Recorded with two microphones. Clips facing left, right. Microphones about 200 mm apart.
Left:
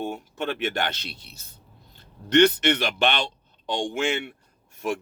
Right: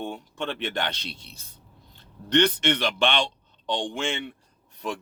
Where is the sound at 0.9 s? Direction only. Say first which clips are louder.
Right 1 dB; 5° left (ahead or behind).